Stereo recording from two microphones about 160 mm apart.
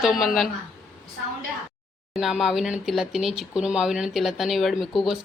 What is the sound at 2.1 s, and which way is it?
Speech, centre (ahead or behind).